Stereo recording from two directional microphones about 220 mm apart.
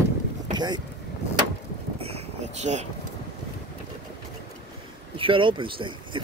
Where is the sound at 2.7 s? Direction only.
20° right (ahead or behind).